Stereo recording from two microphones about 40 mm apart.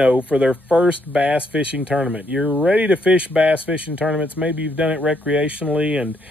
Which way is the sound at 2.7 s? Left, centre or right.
Right.